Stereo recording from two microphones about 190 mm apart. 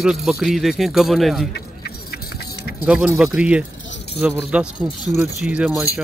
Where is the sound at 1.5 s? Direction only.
55° left (ahead or behind).